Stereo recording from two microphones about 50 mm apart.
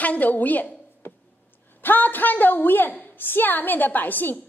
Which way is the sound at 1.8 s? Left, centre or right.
Left.